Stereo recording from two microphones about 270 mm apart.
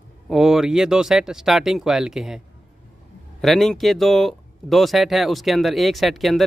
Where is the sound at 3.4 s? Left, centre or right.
Centre.